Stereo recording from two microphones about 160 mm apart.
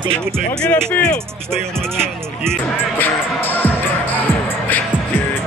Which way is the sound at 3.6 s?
10° left (ahead or behind).